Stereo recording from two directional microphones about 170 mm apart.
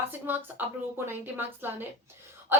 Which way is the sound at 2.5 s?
15° right (ahead or behind).